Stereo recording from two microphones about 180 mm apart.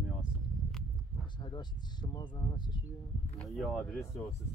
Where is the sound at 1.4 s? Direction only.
25° left (ahead or behind).